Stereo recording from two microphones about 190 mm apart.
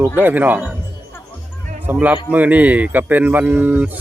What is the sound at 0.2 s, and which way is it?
Speech, 10° right (ahead or behind).